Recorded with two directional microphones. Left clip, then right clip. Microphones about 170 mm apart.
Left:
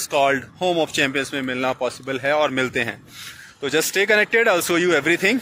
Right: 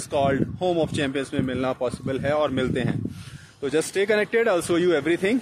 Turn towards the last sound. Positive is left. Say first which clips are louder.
# left 4 dB
turn(degrees=0)  # may be behind; listen again after turning